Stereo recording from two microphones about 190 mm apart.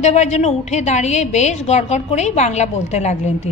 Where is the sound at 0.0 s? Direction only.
35° left (ahead or behind).